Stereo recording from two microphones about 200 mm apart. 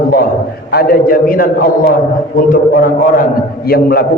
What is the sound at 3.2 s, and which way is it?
Speech, 50° left (ahead or behind).